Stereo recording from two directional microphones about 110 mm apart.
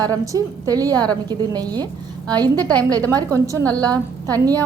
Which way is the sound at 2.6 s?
10° left (ahead or behind).